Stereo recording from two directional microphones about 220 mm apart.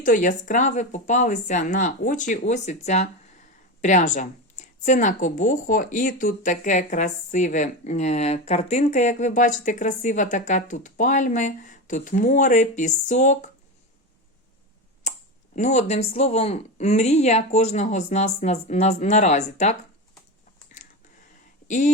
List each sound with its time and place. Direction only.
0.0 s a woman's voice: 35° left (ahead or behind)
15.1 s a sound: 30° left (ahead or behind)
15.5 s a woman's voice: 30° left (ahead or behind)
21.7 s a woman's voice: 35° left (ahead or behind)